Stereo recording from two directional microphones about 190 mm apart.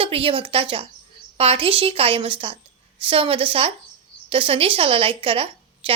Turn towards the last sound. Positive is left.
turn(degrees=-30)  # may be behind; listen again after turning